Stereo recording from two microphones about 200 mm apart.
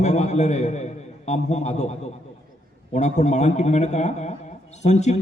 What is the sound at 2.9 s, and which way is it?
A man's voice, 35° left (ahead or behind).